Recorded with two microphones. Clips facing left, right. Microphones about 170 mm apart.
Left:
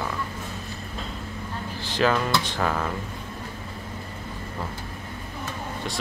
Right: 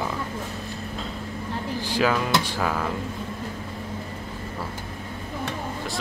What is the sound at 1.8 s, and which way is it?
Speech, 10° right (ahead or behind).